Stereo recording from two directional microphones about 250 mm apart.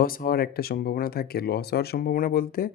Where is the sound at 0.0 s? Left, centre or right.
Left.